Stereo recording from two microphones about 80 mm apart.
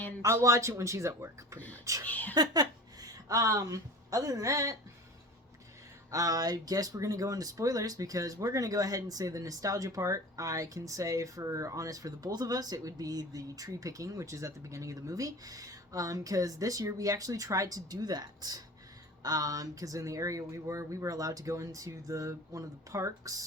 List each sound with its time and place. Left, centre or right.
0.4 s speech: right
1.5 s speech: centre
1.8 s speech: right
2.0 s a sound: left
2.3 s a woman's voice: right
6.1 s speech: right